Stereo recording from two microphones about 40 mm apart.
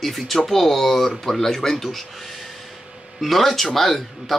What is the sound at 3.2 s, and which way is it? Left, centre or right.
Speech, centre.